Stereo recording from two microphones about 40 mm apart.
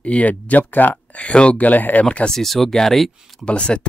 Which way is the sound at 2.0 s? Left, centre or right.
Left.